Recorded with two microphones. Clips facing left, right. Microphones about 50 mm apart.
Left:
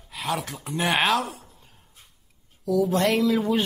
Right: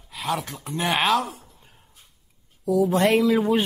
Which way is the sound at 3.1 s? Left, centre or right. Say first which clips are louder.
Right 3 dB; centre.